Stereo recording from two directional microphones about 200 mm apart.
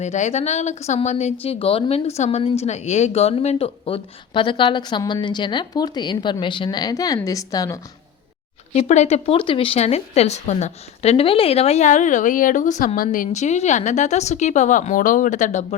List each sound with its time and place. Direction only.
0.0 s a woman's voice: 35° left (ahead or behind); by 7.8 s 15° left (ahead or behind)
8.7 s speech: 35° left (ahead or behind)